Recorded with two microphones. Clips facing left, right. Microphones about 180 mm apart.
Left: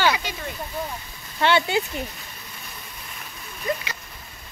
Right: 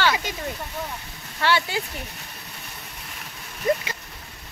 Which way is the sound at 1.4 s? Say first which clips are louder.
Left 3 dB; 20° left (ahead or behind).